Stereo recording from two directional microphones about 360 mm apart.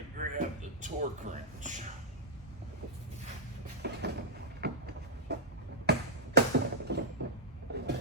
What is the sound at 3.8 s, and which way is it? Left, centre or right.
Cupboard open or close, right.